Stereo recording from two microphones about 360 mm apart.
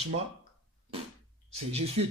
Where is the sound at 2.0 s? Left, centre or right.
Right.